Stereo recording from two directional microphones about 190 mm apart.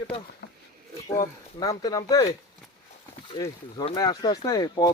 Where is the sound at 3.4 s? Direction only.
20° left (ahead or behind).